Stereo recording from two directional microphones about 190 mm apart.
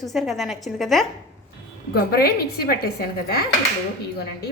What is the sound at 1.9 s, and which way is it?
Speech, 55° left (ahead or behind).